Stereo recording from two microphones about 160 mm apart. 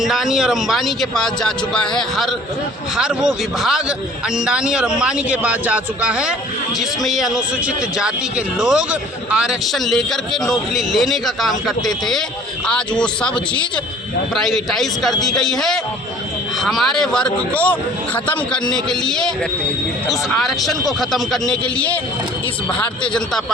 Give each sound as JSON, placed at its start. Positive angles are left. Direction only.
{"t": 0.0, "sound": "a man's voice", "side_deg": 0}
{"t": 8.5, "sound": "a man's voice", "side_deg": -5}